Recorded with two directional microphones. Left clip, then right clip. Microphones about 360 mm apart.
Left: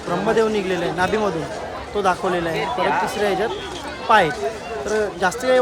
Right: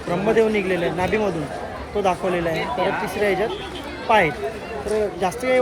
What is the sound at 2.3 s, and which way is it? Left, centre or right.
Speech, left.